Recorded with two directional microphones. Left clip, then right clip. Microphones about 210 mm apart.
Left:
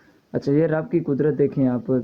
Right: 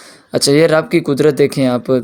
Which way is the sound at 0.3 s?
25° right (ahead or behind).